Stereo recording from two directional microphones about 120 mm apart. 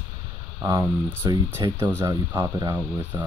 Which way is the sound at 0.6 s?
25° right (ahead or behind).